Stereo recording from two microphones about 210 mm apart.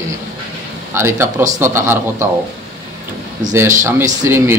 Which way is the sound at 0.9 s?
10° right (ahead or behind).